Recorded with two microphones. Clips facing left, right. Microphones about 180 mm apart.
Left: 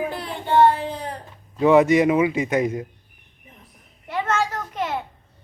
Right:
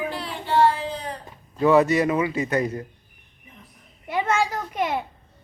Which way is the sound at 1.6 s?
15° left (ahead or behind).